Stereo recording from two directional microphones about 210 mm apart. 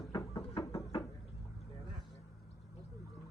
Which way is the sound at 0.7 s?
15° left (ahead or behind).